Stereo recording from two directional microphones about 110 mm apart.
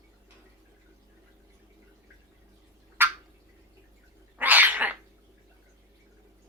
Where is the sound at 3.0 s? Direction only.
20° right (ahead or behind).